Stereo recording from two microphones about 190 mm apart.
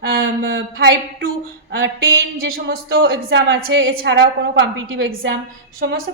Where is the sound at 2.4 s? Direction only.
70° right (ahead or behind).